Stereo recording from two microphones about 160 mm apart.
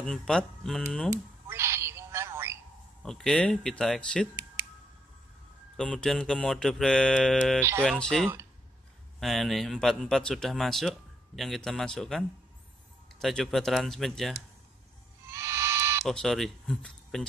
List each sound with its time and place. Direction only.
0.0 s speech: 5° left (ahead or behind)
1.1 s telephone: 15° right (ahead or behind)
3.0 s speech: 5° left (ahead or behind)
5.8 s speech: 5° left (ahead or behind)
15.3 s music: 20° right (ahead or behind)
16.1 s speech: centre (ahead or behind)